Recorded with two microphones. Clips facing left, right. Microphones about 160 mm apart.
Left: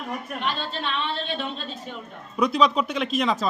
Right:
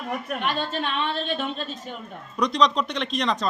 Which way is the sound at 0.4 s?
50° right (ahead or behind).